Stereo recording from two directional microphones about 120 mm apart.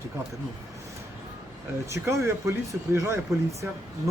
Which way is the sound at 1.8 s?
25° right (ahead or behind).